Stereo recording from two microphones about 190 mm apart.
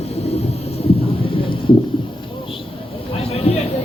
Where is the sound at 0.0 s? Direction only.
35° left (ahead or behind).